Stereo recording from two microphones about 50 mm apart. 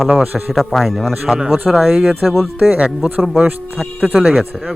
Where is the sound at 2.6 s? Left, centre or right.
Right.